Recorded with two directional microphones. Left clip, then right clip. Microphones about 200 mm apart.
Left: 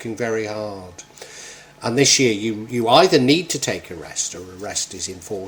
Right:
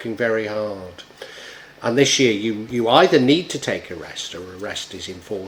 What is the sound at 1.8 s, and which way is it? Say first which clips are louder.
Speech: even; 30° left (ahead or behind).